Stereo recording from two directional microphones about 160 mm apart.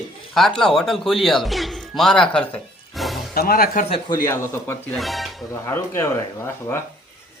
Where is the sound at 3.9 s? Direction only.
25° left (ahead or behind).